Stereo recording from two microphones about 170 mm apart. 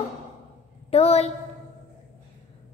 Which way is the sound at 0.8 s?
40° left (ahead or behind).